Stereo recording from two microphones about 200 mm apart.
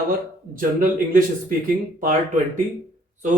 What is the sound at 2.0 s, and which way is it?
Speech, 40° right (ahead or behind).